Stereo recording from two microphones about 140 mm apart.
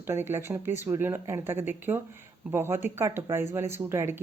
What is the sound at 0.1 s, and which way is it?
Speech, 15° right (ahead or behind).